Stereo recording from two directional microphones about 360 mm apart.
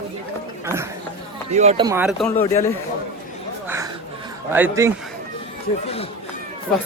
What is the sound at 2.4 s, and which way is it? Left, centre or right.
Speech, centre.